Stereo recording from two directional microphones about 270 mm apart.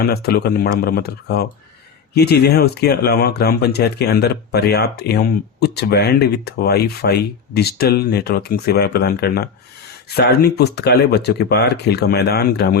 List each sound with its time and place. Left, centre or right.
0.0 s speech: left